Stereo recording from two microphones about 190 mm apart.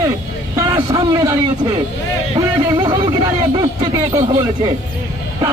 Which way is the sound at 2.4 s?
20° right (ahead or behind).